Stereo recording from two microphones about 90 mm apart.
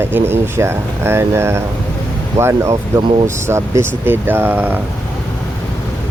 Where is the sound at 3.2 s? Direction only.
30° right (ahead or behind).